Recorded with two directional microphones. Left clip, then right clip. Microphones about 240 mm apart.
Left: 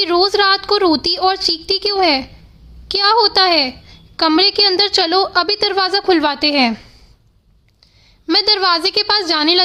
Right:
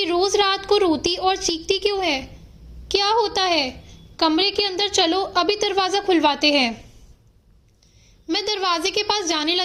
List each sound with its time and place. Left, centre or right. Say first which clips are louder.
0.0 s a woman's voice: left 6 dB; centre
1.3 s a sound: left 5 dB; left
1.9 s a woman's voice: left 8 dB; centre
8.3 s a woman's voice: left 8 dB; left